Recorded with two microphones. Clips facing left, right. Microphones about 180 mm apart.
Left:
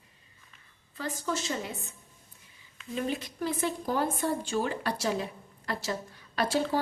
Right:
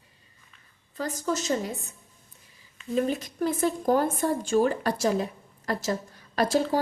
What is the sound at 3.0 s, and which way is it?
A woman's voice, 45° right (ahead or behind).